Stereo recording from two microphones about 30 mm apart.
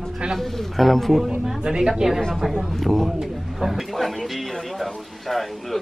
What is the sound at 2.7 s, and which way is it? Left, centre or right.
Speech, centre.